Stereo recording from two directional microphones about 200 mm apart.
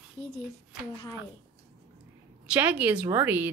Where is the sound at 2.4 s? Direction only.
5° right (ahead or behind).